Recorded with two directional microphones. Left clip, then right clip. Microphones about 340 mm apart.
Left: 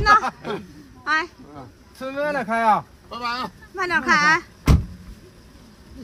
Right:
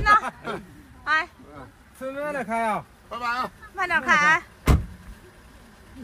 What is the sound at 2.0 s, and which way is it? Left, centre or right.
Speech, centre.